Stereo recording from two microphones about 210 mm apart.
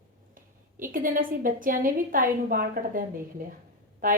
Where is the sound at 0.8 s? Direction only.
40° right (ahead or behind).